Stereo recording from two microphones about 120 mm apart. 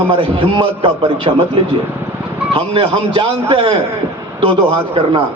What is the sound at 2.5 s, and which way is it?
A man's voice, 50° right (ahead or behind).